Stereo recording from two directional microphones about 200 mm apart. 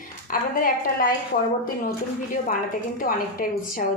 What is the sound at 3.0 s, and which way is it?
Speech, 45° left (ahead or behind).